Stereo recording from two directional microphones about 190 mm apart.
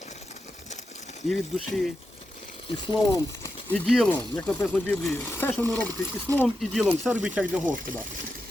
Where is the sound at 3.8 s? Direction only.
Centre (ahead or behind).